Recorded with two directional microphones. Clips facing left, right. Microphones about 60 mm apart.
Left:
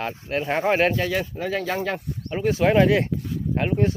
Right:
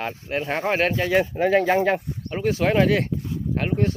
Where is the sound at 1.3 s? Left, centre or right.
Right.